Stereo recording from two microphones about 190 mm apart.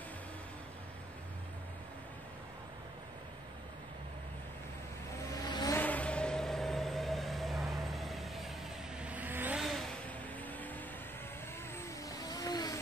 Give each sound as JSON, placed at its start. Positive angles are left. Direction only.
{"t": 5.4, "sound": "vehicle", "side_deg": 20}
{"t": 5.8, "sound": "vehicle", "side_deg": 10}
{"t": 11.8, "sound": "vehicle", "side_deg": 20}